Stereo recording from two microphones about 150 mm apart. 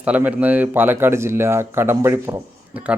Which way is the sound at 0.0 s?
10° right (ahead or behind).